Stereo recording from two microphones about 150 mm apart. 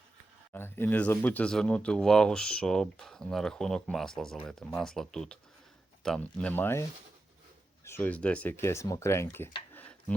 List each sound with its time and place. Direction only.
0.5 s speech: 15° left (ahead or behind)
7.9 s speech: 15° left (ahead or behind)
9.7 s a sound: 10° left (ahead or behind)